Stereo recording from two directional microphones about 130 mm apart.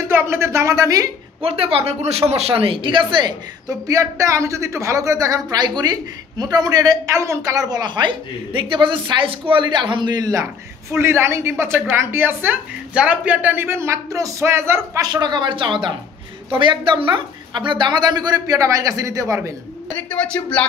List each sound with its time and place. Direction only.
0.1 s speech: 20° right (ahead or behind)
1.4 s speech: 45° right (ahead or behind); by 15.0 s 20° right (ahead or behind)
15.1 s speech: 35° right (ahead or behind)
20.1 s speech: 10° left (ahead or behind)